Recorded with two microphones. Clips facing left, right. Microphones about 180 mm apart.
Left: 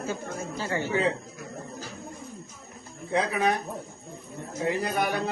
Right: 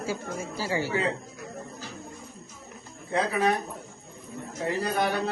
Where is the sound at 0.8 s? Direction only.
20° left (ahead or behind).